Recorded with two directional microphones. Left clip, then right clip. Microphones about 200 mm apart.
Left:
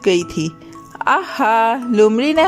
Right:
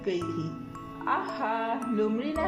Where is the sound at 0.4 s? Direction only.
50° left (ahead or behind).